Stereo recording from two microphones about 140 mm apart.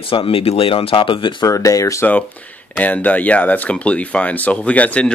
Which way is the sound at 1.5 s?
25° left (ahead or behind).